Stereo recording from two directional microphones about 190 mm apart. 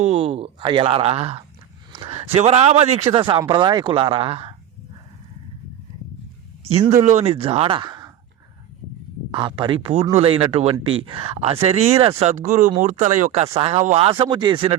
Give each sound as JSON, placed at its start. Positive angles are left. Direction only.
{"t": 0.0, "sound": "speech", "side_deg": -30}
{"t": 6.7, "sound": "speech", "side_deg": -30}
{"t": 9.3, "sound": "speech", "side_deg": -25}